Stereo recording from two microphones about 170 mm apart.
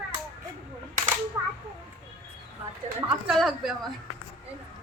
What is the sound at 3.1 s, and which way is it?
Speech, centre (ahead or behind).